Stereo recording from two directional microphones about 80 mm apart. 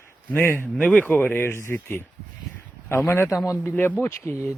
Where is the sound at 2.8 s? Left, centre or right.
Left.